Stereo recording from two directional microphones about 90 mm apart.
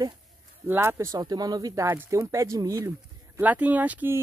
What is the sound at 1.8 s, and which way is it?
Speech, 30° right (ahead or behind).